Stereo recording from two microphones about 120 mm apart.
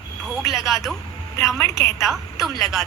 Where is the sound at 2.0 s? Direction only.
Centre (ahead or behind).